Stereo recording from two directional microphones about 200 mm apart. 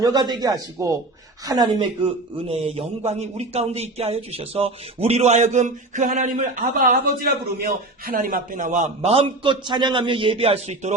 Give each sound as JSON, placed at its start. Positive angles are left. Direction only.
{"t": 0.0, "sound": "a man's voice", "side_deg": -20}